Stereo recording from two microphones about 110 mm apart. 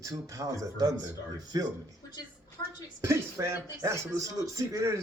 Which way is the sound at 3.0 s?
25° right (ahead or behind).